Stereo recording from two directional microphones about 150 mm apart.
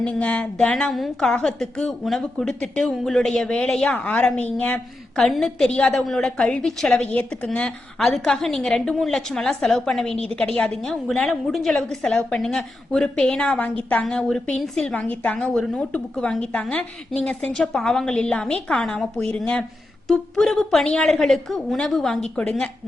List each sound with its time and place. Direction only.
0.0 s a woman's voice: 10° left (ahead or behind)